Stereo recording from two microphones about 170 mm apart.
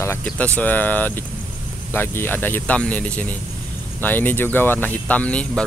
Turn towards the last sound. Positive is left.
turn(degrees=5)  # may be behind; listen again after turning